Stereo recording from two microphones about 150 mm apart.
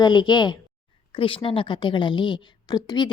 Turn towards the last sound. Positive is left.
turn(degrees=25)  # may be behind; listen again after turning